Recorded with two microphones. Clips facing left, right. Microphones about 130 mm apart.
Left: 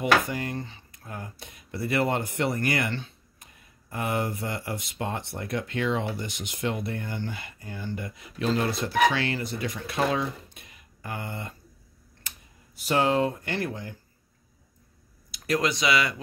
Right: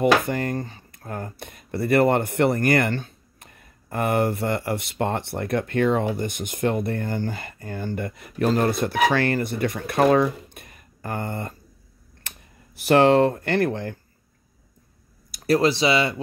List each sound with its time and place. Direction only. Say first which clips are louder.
0.0 s speech: right 5 dB; 50° right (ahead or behind)
12.2 s computer keyboard: right 3 dB; 60° right (ahead or behind)
12.8 s speech: right 8 dB; 65° right (ahead or behind)
15.3 s speech: right 7 dB; 35° right (ahead or behind)